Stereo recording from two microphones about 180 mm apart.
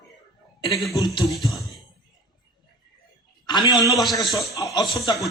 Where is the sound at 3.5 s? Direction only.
25° left (ahead or behind).